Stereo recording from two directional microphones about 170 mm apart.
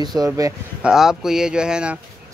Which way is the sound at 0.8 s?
5° right (ahead or behind).